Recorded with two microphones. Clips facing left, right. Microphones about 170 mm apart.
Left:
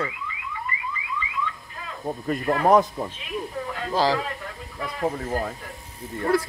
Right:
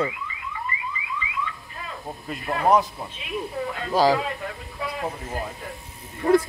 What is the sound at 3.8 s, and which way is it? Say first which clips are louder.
Speech: right 3 dB; 15° right (ahead or behind).